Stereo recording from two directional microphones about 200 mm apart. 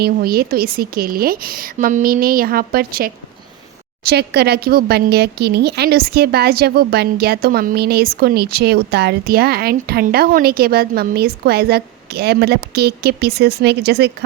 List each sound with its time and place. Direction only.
0.0 s a woman's voice: 50° right (ahead or behind)